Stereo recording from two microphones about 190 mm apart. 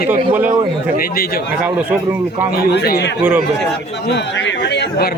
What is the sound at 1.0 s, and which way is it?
Speech, 50° left (ahead or behind).